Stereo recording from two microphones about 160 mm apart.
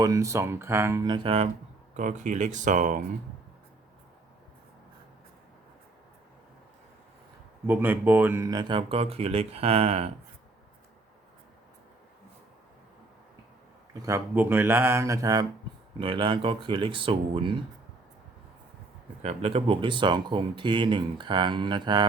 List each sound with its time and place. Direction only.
0.0 s speech: 20° right (ahead or behind)
1.0 s speech: 30° right (ahead or behind)
2.0 s speech: 50° right (ahead or behind)
7.7 s speech: 10° right (ahead or behind)
8.4 s speech: 30° right (ahead or behind)
14.0 s speech: 15° right (ahead or behind); by 17.6 s 30° right (ahead or behind)
19.2 s speech: 40° right (ahead or behind)